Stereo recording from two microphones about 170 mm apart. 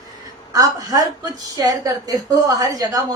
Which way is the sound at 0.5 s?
20° right (ahead or behind).